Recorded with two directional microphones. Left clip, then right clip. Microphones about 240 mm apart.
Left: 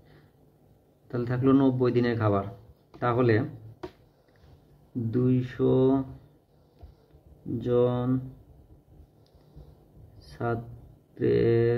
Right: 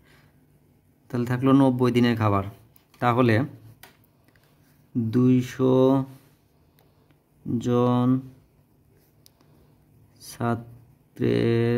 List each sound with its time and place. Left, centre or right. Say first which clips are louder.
1.0 s a man's voice: right 2 dB; right
5.1 s a man's voice: right 5 dB; right
7.6 s a man's voice: right 2 dB; right
10.2 s a sound: right 3 dB; right
11.1 s a man's voice: even; right